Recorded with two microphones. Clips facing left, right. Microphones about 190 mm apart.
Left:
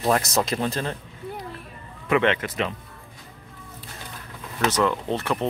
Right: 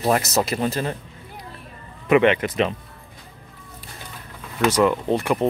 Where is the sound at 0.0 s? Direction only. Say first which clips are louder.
Right 2 dB; 5° right (ahead or behind).